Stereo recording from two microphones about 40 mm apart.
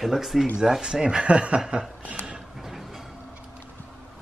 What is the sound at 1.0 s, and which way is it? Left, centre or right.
Speech, right.